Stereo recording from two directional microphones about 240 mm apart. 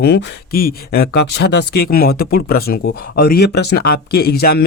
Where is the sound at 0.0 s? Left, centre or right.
Left.